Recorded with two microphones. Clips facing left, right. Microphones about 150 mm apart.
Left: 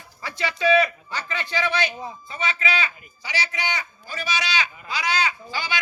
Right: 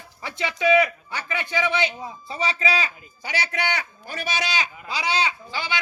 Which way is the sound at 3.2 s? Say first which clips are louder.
Right 2 dB; 55° right (ahead or behind).